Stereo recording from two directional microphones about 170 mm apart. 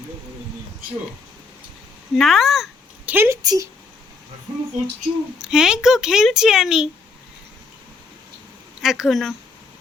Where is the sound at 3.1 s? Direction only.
15° right (ahead or behind).